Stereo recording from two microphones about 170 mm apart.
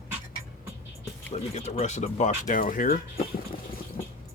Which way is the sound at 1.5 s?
40° left (ahead or behind).